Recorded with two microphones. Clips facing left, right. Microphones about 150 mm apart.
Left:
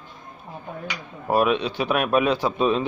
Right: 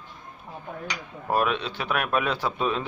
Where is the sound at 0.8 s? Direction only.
15° left (ahead or behind).